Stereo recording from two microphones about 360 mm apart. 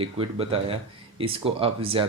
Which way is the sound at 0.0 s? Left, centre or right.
Centre.